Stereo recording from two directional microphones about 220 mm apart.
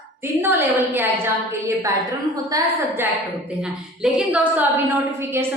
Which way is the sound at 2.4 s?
15° right (ahead or behind).